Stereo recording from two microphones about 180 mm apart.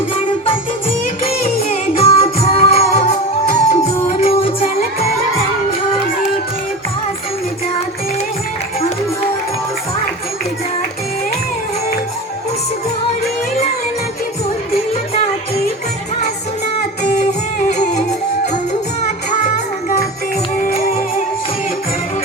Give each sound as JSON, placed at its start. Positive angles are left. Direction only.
{"t": 1.2, "sound": "music", "side_deg": 35}
{"t": 17.2, "sound": "music", "side_deg": 45}
{"t": 18.7, "sound": "music", "side_deg": 40}